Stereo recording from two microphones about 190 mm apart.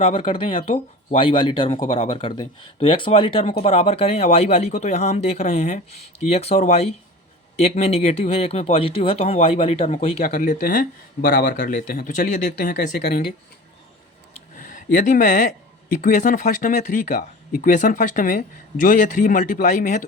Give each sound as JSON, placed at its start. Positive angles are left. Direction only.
{"t": 0.0, "sound": "speech", "side_deg": 30}
{"t": 10.2, "sound": "speech", "side_deg": 45}
{"t": 14.6, "sound": "speech", "side_deg": 40}